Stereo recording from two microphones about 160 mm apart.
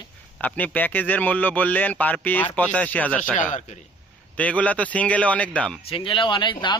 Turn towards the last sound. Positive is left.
turn(degrees=30)  # may be behind; listen again after turning